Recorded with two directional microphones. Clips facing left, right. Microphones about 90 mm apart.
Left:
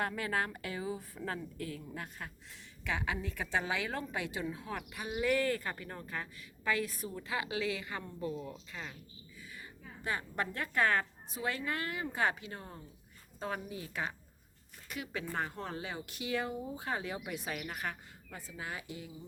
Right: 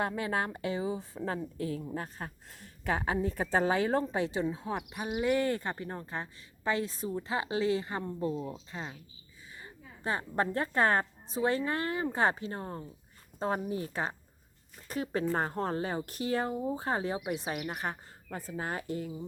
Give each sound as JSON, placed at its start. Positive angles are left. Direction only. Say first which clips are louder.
{"t": 0.0, "sound": "a woman's voice", "louder": "right 3 dB", "side_deg": -25}
{"t": 18.3, "sound": "speech", "louder": "right 7 dB", "side_deg": -45}